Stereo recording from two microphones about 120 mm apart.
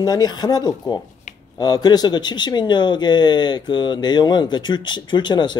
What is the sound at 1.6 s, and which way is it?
Speech, 35° left (ahead or behind).